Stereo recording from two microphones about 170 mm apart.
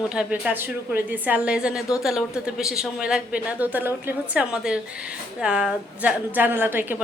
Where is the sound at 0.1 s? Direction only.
5° right (ahead or behind).